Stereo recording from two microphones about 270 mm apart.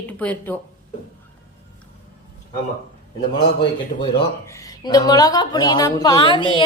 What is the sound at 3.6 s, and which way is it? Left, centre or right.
Speech, centre.